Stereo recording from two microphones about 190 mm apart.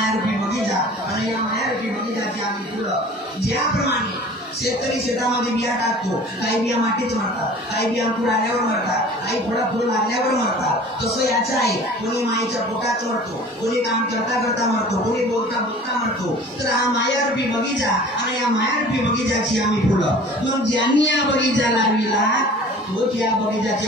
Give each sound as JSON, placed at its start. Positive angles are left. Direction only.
{"t": 7.7, "sound": "a woman's voice", "side_deg": 60}
{"t": 20.9, "sound": "a man's voice", "side_deg": 70}